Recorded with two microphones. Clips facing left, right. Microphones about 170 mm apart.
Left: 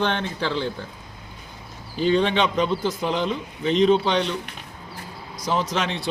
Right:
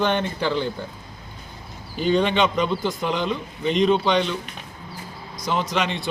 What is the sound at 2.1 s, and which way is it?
Speech, centre (ahead or behind).